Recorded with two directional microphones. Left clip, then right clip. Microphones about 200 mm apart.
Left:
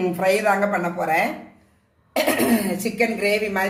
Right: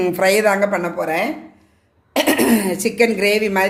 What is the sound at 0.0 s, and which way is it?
Speech, 55° right (ahead or behind).